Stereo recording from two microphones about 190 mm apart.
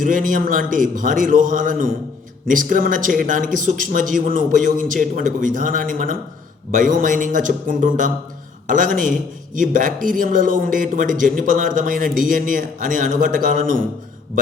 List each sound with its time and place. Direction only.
0.0 s speech: 45° right (ahead or behind)